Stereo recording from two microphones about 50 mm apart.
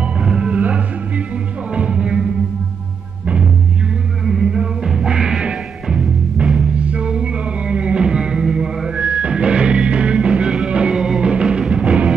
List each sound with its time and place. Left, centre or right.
0.0 s music: centre
4.3 s music: centre